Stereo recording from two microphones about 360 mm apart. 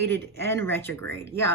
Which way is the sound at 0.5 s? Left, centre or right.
Centre.